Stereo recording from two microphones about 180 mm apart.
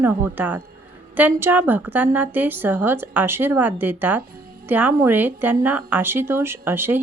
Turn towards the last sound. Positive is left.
turn(degrees=-10)  # may be behind; listen again after turning